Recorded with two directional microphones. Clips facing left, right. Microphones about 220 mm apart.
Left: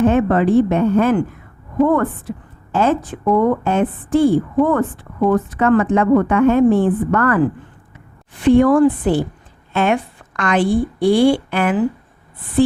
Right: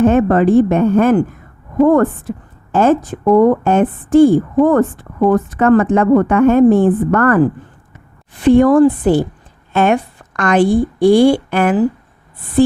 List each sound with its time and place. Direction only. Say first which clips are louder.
0.0 s a woman's voice: right 3 dB; 45° right (ahead or behind)